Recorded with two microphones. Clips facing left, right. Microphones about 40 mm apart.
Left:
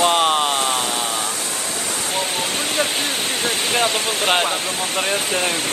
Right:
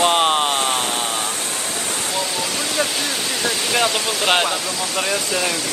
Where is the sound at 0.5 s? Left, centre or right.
Right.